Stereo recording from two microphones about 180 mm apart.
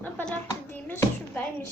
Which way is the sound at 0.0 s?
10° left (ahead or behind).